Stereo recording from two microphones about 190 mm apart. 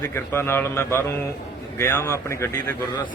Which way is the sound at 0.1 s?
15° left (ahead or behind).